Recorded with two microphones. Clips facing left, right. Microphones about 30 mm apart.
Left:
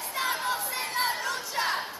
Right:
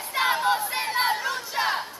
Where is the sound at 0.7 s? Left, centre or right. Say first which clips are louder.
Right 5 dB; centre.